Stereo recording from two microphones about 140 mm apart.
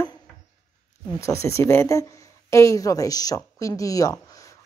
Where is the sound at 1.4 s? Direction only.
20° left (ahead or behind).